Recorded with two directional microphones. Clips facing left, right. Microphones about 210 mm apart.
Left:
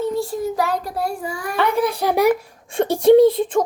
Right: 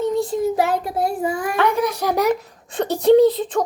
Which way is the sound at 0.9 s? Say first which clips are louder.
Right 4 dB; 20° right (ahead or behind).